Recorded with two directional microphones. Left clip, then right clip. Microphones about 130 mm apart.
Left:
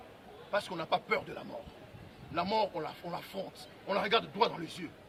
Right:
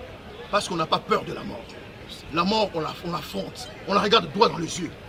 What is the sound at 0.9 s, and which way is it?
Speech, 55° left (ahead or behind).